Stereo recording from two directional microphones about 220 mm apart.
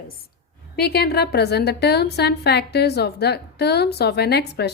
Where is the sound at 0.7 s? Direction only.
45° left (ahead or behind).